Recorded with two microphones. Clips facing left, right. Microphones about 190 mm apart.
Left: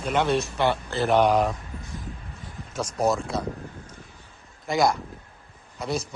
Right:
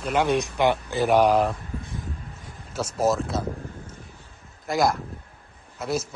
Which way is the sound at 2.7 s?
Centre (ahead or behind).